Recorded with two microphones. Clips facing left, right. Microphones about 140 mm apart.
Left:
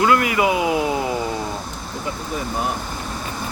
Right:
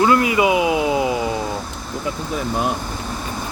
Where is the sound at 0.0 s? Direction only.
25° right (ahead or behind).